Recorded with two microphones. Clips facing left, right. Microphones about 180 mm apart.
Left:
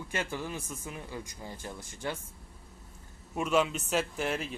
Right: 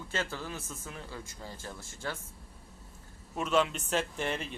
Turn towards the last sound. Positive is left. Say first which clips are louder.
# left 2 dB
turn(degrees=5)  # may be behind; listen again after turning